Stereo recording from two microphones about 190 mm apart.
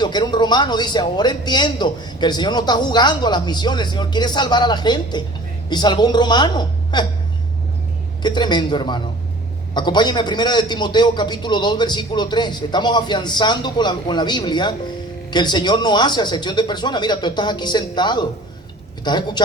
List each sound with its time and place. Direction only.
0.0 s a man's voice: 25° left (ahead or behind)
8.2 s a man's voice: 25° left (ahead or behind)